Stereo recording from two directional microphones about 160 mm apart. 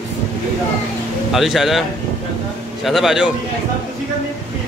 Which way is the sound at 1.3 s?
Centre (ahead or behind).